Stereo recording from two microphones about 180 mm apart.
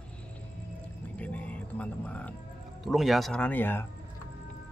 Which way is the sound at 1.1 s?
10° left (ahead or behind).